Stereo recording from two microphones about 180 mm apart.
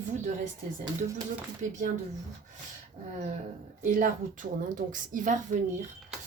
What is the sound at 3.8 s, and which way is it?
Speech, 45° right (ahead or behind).